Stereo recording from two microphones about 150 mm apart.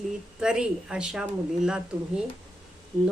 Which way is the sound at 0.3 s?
5° right (ahead or behind).